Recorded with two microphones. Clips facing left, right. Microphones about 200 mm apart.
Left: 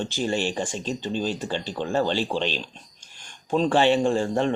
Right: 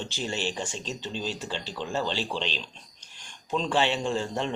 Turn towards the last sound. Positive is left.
turn(degrees=50)  # may be behind; listen again after turning